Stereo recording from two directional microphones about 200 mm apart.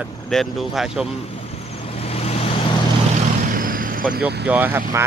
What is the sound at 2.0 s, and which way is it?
Vehicle, 30° left (ahead or behind).